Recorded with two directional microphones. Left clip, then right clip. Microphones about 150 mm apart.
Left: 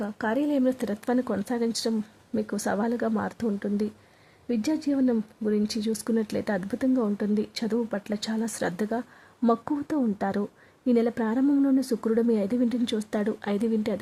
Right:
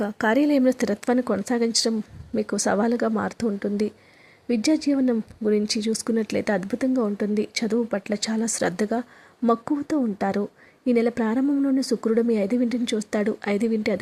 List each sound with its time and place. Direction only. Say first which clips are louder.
0.0 s speech: right 6 dB; 20° right (ahead or behind)